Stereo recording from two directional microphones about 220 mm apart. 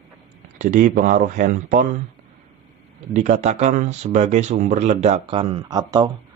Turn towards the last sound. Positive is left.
turn(degrees=-20)  # may be behind; listen again after turning